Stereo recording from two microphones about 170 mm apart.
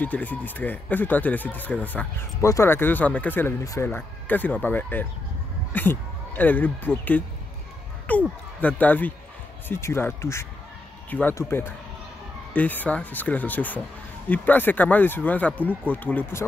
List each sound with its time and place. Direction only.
0.0 s speech: 10° left (ahead or behind)